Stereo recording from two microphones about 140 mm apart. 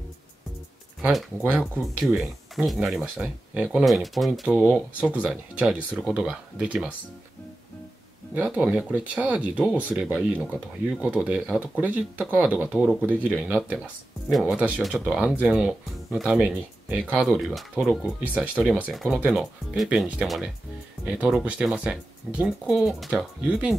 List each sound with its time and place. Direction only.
1.0 s speech: 10° right (ahead or behind)
8.4 s speech: 10° right (ahead or behind)
14.3 s speech: 5° right (ahead or behind)